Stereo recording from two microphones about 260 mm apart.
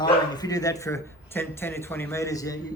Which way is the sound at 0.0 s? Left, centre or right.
Centre.